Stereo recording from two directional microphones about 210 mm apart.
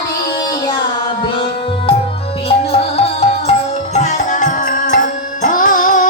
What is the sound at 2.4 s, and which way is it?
Music, 25° left (ahead or behind).